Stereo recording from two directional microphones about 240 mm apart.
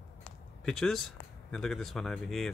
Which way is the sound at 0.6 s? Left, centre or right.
Centre.